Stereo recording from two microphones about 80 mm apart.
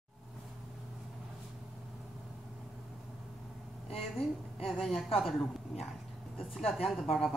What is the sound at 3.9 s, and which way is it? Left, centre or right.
A woman's voice, centre.